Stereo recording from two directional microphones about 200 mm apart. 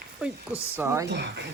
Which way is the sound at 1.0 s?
60° right (ahead or behind).